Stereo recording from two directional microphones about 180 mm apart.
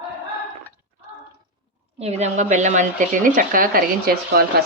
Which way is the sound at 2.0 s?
40° right (ahead or behind).